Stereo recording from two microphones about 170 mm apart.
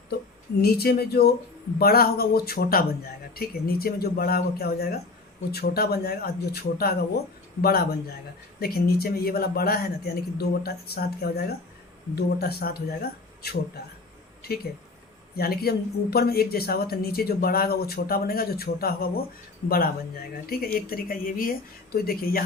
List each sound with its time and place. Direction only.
0.6 s a woman's voice: 65° left (ahead or behind)